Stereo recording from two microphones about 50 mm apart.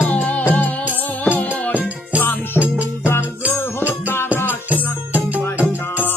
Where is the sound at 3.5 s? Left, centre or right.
Left.